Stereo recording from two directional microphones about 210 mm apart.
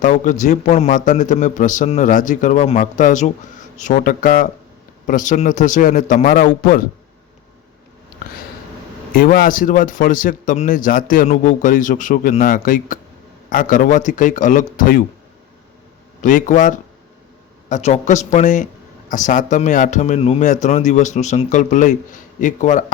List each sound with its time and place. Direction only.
0.0 s a man's voice: 35° left (ahead or behind)
9.1 s a man's voice: 45° left (ahead or behind)
16.2 s a man's voice: 35° left (ahead or behind)